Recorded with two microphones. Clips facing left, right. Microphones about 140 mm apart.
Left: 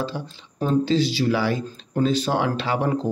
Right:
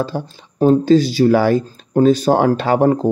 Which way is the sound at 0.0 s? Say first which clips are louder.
Right 6 dB; 45° right (ahead or behind).